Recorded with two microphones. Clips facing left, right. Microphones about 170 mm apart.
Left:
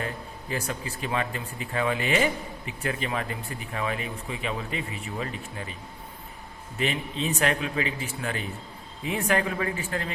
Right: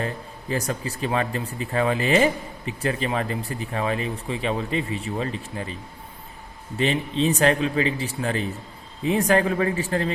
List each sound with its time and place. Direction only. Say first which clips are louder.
0.5 s speech: right 5 dB; 40° right (ahead or behind)
6.7 s speech: right 6 dB; 30° right (ahead or behind)